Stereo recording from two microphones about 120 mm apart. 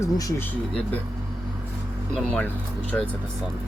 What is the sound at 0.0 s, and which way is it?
Speech, 25° left (ahead or behind).